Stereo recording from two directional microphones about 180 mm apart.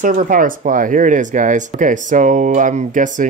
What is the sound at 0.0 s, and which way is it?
Speech, 50° right (ahead or behind).